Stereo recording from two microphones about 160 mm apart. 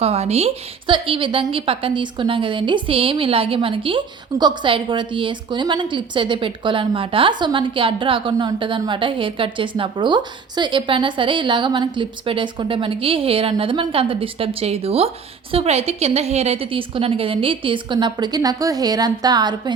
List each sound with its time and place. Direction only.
0.0 s a woman's voice: 40° right (ahead or behind)